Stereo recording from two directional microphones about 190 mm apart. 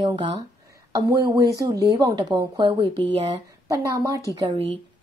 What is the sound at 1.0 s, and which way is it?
A woman's voice, 15° right (ahead or behind).